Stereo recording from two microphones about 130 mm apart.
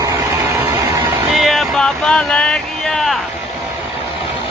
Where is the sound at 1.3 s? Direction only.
Centre (ahead or behind).